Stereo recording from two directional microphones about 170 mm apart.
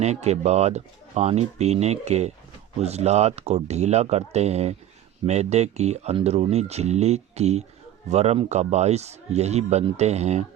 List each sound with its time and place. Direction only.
0.0 s speech: 40° right (ahead or behind)